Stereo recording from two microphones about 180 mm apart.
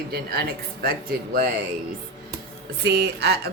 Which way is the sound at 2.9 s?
65° right (ahead or behind).